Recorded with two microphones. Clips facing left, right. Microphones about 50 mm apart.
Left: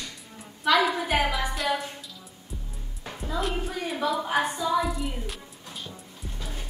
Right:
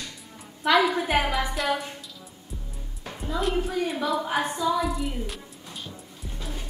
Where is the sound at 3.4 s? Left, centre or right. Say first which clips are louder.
Right 5 dB; centre.